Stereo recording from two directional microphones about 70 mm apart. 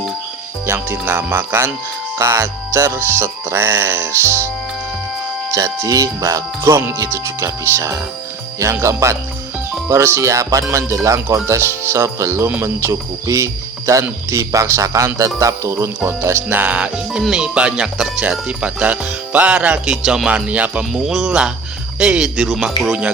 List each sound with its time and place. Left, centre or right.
0.7 s music: right
2.1 s music: right
5.5 s speech: right
6.6 s music: right
7.1 s speech: right
11.4 s music: right
13.2 s speech: right
16.0 s music: right
17.1 s speech: centre
19.8 s speech: centre
20.3 s music: centre
20.9 s speech: centre